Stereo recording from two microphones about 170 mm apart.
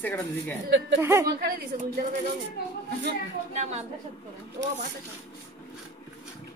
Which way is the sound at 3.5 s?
45° right (ahead or behind).